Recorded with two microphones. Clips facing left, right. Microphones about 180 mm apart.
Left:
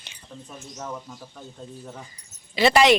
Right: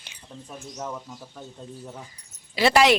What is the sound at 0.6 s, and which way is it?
Speech, 5° right (ahead or behind).